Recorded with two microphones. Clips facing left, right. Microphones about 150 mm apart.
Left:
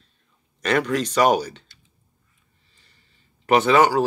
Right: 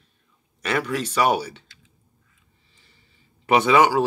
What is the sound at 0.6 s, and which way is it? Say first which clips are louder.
Speech: left 3 dB; 5° right (ahead or behind).